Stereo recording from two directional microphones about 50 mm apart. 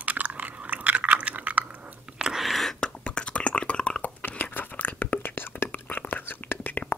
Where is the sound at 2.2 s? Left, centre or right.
Centre.